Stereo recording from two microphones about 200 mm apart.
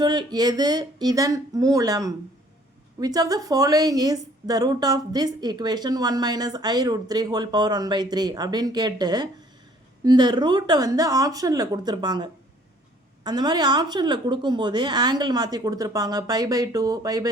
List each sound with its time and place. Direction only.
0.0 s a woman's voice: 20° right (ahead or behind)